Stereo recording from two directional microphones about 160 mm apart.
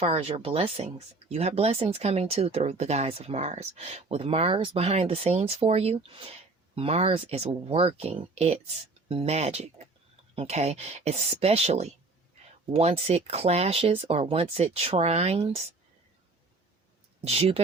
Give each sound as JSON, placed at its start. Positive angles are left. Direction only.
{"t": 0.0, "sound": "speech", "side_deg": -40}
{"t": 17.2, "sound": "speech", "side_deg": -40}